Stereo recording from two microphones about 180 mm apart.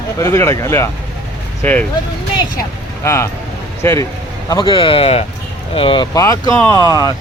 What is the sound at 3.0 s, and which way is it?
Speech, 15° left (ahead or behind).